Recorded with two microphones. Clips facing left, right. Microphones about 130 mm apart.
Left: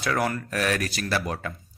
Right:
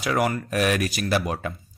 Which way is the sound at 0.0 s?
10° right (ahead or behind).